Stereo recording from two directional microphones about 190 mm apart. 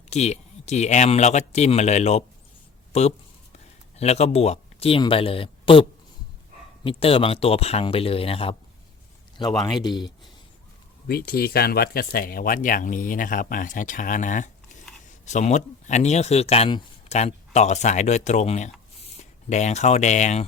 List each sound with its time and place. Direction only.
0.1 s speech: 35° left (ahead or behind)
6.8 s speech: 30° left (ahead or behind)
9.8 s speech: 20° left (ahead or behind)
11.1 s speech: 55° left (ahead or behind); by 20.4 s 40° left (ahead or behind)